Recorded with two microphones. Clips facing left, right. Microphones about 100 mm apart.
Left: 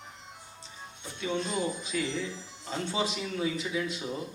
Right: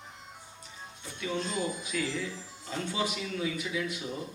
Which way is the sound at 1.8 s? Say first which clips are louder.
Left 1 dB; 25° left (ahead or behind).